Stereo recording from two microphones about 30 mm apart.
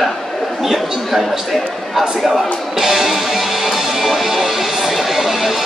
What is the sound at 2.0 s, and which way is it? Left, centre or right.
Music, centre.